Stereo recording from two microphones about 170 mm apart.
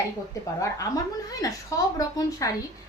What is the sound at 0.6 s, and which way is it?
A woman's voice, 20° left (ahead or behind).